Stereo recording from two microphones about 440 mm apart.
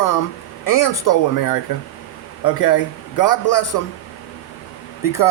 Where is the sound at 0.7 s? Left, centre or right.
Left.